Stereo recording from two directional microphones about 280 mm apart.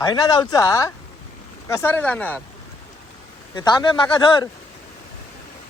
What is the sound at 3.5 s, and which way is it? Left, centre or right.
Speech, centre.